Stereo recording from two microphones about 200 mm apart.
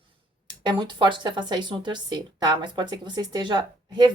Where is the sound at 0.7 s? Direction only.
25° right (ahead or behind).